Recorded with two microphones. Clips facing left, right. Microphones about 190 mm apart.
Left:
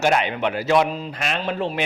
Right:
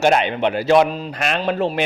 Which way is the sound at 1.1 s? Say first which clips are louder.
Right 4 dB; 55° right (ahead or behind).